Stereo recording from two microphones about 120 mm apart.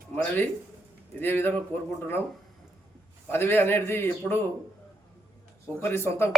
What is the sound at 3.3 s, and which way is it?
A man's voice, 20° left (ahead or behind).